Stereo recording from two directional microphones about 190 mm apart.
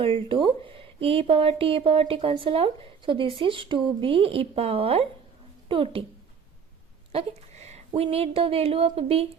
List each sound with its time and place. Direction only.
0.0 s speech: 30° right (ahead or behind)
7.1 s speech: 35° right (ahead or behind)